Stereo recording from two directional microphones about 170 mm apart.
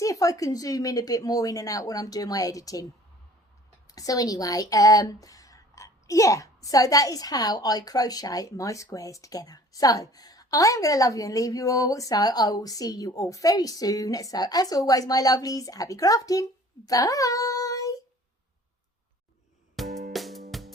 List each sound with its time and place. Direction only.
0.0 s speech: 20° left (ahead or behind)
3.9 s speech: 20° left (ahead or behind)
19.9 s music: 55° right (ahead or behind)
20.1 s music: centre (ahead or behind)